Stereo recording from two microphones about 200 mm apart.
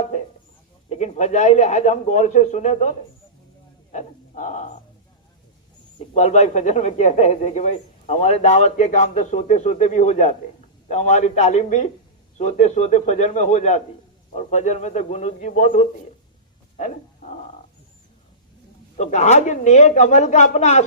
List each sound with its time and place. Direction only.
0.9 s a man's voice: 35° left (ahead or behind)
3.9 s a sound: 35° left (ahead or behind)
6.1 s a man's voice: 35° left (ahead or behind)
18.9 s a man's voice: 35° left (ahead or behind)